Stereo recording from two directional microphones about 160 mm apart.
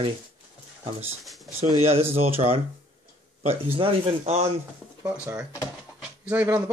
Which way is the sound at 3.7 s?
40° right (ahead or behind).